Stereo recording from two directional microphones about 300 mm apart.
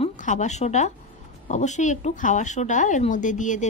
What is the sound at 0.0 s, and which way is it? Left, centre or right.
Speech, left.